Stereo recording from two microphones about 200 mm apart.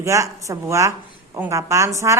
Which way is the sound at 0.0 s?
15° right (ahead or behind).